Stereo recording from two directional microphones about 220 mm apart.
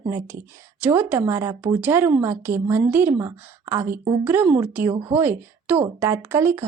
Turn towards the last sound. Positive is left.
turn(degrees=-10)  # may be behind; listen again after turning